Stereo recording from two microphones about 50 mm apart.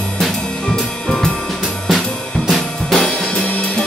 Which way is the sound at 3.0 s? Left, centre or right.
Centre.